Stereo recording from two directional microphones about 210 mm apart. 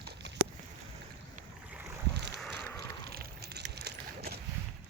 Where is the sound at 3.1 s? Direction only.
50° right (ahead or behind).